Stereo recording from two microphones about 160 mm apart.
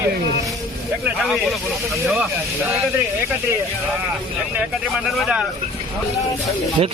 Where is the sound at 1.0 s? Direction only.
Centre (ahead or behind).